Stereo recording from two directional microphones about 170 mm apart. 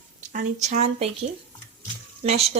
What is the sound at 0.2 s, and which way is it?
Speech, 45° right (ahead or behind).